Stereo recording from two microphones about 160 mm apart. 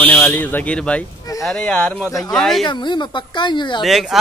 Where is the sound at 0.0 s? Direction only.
10° left (ahead or behind).